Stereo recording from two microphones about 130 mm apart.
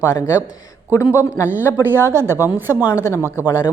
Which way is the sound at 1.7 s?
15° right (ahead or behind).